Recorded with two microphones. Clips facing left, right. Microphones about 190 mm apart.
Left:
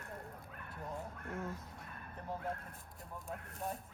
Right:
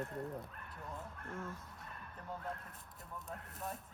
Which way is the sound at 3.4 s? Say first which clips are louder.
Left 4 dB; centre (ahead or behind).